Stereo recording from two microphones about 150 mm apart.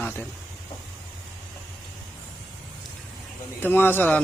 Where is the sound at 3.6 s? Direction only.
15° left (ahead or behind).